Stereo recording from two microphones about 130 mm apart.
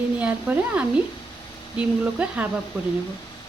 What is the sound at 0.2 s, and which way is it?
Speech, 10° right (ahead or behind).